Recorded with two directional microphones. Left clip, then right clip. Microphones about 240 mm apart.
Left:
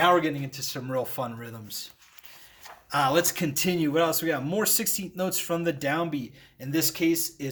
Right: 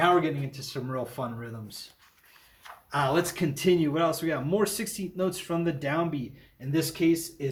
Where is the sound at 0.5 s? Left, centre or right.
Left.